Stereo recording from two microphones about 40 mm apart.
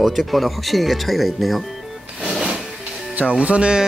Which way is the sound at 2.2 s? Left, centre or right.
Centre.